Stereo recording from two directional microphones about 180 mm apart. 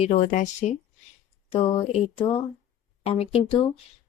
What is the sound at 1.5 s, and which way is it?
Speech, 30° left (ahead or behind).